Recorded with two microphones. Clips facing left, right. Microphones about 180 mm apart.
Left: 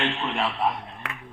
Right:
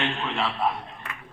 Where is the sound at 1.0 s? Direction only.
75° left (ahead or behind).